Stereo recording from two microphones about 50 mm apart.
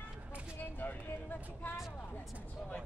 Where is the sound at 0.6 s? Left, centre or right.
Left.